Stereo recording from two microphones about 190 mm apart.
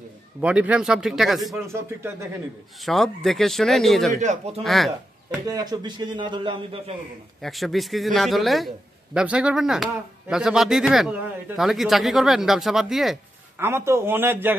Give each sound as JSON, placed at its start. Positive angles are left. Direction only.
{"t": 0.4, "sound": "a man's voice", "side_deg": -5}
{"t": 1.5, "sound": "a man's voice", "side_deg": -15}
{"t": 2.8, "sound": "a man's voice", "side_deg": 0}
{"t": 4.1, "sound": "speech", "side_deg": -35}
{"t": 4.6, "sound": "speech", "side_deg": 0}
{"t": 5.5, "sound": "a man's voice", "side_deg": -20}
{"t": 7.4, "sound": "a man's voice", "side_deg": 0}
{"t": 13.6, "sound": "a man's voice", "side_deg": -15}